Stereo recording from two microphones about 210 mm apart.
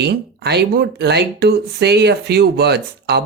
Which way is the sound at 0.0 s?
50° right (ahead or behind).